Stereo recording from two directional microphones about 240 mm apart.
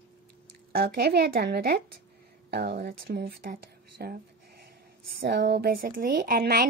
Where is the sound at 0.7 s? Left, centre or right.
Right.